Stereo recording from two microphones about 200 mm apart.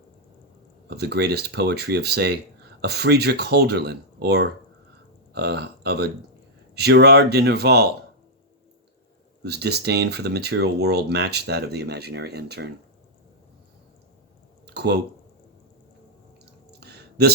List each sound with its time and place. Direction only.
0.9 s speech: 55° right (ahead or behind)
9.4 s speech: 55° right (ahead or behind)
14.7 s typing: 55° right (ahead or behind)
16.5 s a sound: 55° right (ahead or behind)